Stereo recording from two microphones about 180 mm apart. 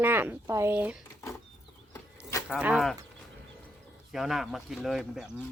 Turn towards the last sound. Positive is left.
turn(degrees=0)  # may be behind; listen again after turning